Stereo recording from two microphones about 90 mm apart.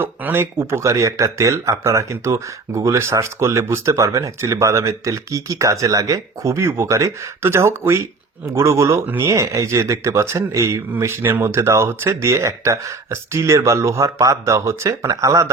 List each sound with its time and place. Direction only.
0.0 s speech: 25° right (ahead or behind)